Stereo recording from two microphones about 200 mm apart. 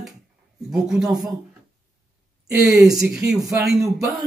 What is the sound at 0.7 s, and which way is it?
Speech, centre (ahead or behind).